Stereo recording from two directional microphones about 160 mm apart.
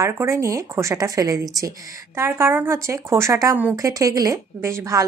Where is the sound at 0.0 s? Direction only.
20° right (ahead or behind).